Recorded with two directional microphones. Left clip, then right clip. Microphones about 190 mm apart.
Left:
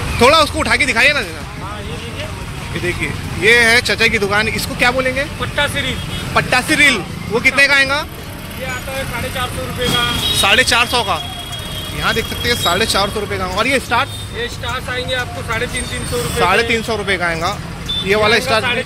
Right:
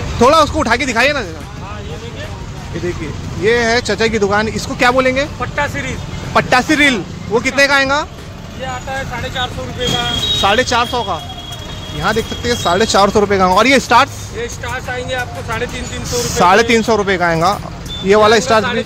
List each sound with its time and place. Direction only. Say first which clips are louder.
0.2 s speech: right 1 dB; 40° right (ahead or behind)
3.4 s speech: left 3 dB; 30° right (ahead or behind); by 5.3 s 50° right (ahead or behind)
5.4 s speech: left 1 dB; 35° right (ahead or behind)
6.3 s speech: right 2 dB; 50° right (ahead or behind)
10.4 s speech: left 2 dB; 30° right (ahead or behind); by 14.1 s 55° right (ahead or behind)
14.7 s speech: left 1 dB; 35° right (ahead or behind)
16.3 s speech: right 4 dB; 50° right (ahead or behind)